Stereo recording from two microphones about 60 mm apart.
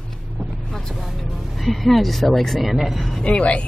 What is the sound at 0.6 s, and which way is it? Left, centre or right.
Speech, centre.